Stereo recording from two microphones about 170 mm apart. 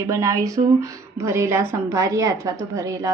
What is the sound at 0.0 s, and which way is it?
A woman's voice, 20° right (ahead or behind).